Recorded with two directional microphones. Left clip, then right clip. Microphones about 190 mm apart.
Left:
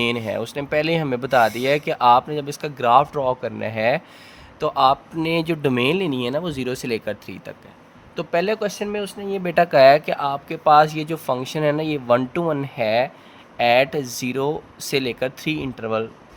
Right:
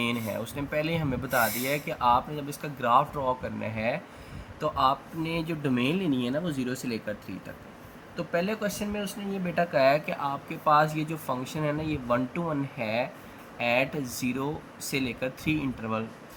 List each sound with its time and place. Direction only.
0.0 s speech: 55° left (ahead or behind)